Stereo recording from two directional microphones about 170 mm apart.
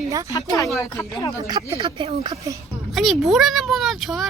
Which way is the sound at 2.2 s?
20° right (ahead or behind).